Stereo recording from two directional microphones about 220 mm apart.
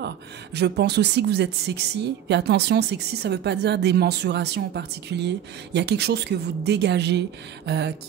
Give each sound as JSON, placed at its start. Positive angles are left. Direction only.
{"t": 0.6, "sound": "a woman's voice", "side_deg": -50}